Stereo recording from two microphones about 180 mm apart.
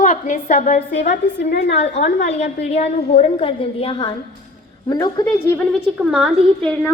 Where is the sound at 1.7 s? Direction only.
35° left (ahead or behind).